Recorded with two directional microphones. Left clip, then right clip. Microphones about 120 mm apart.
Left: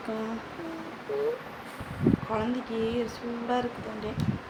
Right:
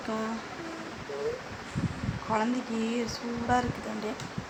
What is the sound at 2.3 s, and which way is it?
Speech, 20° right (ahead or behind).